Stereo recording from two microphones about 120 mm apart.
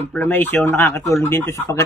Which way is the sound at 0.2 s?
15° left (ahead or behind).